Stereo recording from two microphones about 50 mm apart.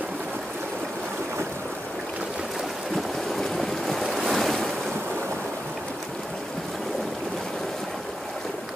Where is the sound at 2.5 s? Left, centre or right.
Centre.